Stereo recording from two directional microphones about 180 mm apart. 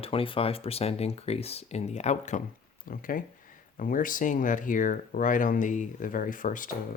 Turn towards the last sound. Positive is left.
turn(degrees=45)  # may be behind; listen again after turning